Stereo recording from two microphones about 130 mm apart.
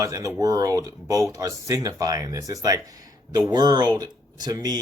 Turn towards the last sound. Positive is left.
turn(degrees=-30)  # may be behind; listen again after turning